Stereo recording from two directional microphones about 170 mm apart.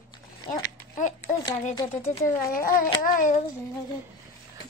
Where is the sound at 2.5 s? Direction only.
55° left (ahead or behind).